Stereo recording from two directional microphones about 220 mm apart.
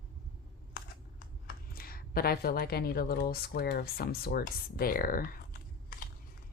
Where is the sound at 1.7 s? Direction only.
40° left (ahead or behind).